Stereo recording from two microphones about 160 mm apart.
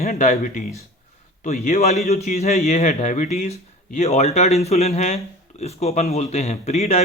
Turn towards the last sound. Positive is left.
turn(degrees=40)  # may be behind; listen again after turning